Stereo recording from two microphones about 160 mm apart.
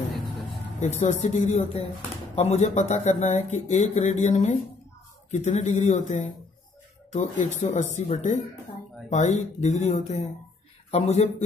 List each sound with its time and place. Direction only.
0.7 s speech: 45° left (ahead or behind)